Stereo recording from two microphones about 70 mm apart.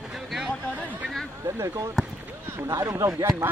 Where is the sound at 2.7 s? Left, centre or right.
Right.